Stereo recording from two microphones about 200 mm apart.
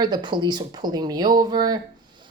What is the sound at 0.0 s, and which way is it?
Speech, 20° right (ahead or behind).